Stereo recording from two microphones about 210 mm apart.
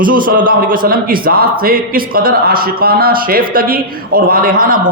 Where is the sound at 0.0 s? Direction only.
40° right (ahead or behind).